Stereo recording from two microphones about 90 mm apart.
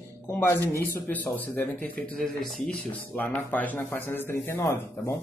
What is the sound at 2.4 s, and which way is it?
Speech, 5° left (ahead or behind).